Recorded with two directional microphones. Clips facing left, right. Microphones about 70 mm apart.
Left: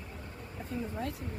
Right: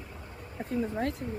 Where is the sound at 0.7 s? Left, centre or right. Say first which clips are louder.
Right 6 dB; right.